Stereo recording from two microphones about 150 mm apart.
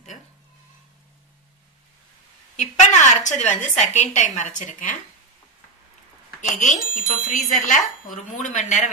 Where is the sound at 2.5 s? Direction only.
50° left (ahead or behind).